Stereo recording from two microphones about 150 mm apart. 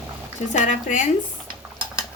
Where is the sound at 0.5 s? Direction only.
55° left (ahead or behind).